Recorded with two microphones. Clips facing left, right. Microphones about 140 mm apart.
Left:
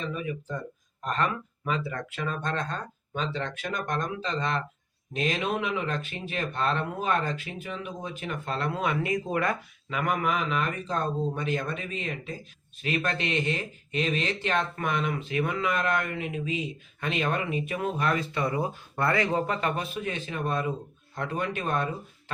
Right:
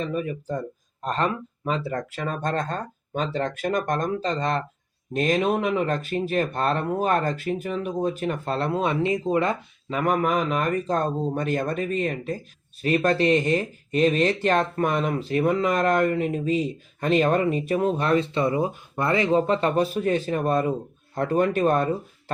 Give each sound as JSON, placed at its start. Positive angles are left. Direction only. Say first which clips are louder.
{"t": 0.0, "sound": "speech", "louder": "right 5 dB", "side_deg": -45}
{"t": 19.6, "sound": "speech", "louder": "right 8 dB", "side_deg": -35}